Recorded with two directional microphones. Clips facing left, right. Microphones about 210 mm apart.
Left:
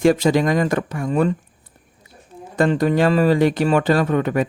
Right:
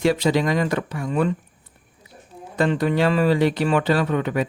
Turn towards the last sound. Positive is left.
turn(degrees=45)  # may be behind; listen again after turning